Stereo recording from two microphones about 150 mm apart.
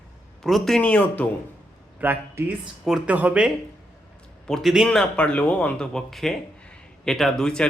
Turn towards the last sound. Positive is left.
turn(degrees=5)  # may be behind; listen again after turning